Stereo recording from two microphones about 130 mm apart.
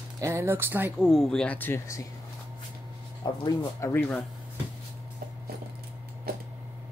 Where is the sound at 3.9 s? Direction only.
10° left (ahead or behind).